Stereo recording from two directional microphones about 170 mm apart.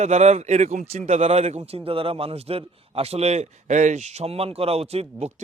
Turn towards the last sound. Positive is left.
turn(degrees=-35)  # may be behind; listen again after turning